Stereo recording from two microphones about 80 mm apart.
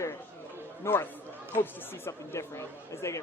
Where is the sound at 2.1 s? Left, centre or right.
Left.